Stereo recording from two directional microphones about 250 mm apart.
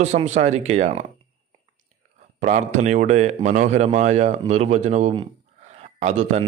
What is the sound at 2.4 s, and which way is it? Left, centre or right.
A man's voice, right.